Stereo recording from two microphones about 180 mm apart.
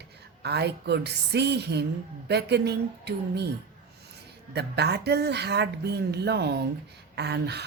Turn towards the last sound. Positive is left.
turn(degrees=-70)  # may be behind; listen again after turning